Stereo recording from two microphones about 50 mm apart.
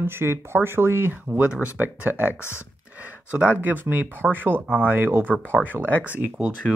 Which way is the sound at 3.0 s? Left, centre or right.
Right.